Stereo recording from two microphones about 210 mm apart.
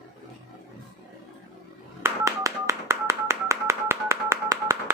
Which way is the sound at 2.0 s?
15° right (ahead or behind).